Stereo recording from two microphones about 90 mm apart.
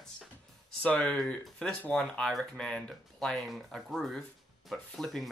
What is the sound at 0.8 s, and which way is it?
Speech, 15° left (ahead or behind).